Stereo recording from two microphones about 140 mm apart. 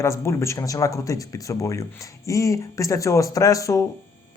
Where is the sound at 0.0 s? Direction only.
20° left (ahead or behind).